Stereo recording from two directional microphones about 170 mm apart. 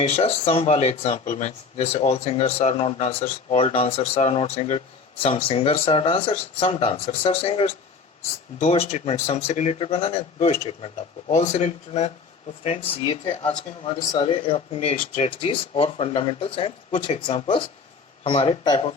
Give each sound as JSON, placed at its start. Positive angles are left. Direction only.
{"t": 0.0, "sound": "speech", "side_deg": 35}